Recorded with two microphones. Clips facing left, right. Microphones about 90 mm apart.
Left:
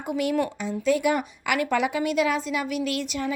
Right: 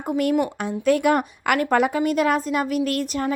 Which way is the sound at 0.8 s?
55° right (ahead or behind).